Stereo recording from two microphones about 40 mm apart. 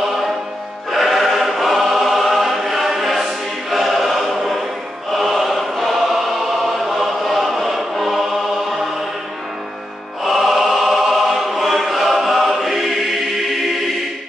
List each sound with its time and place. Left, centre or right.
0.9 s choir: centre
10.2 s choir: centre